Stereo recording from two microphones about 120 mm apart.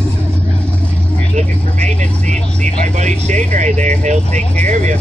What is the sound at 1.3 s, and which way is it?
Vehicle, 80° right.